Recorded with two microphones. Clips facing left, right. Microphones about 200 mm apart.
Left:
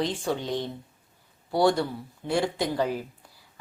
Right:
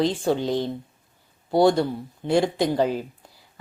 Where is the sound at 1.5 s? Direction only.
20° right (ahead or behind).